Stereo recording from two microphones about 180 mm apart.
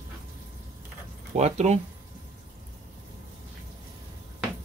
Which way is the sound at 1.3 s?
40° right (ahead or behind).